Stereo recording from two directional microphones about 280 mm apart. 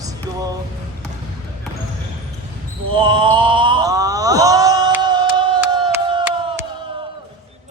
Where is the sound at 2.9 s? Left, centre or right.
Centre.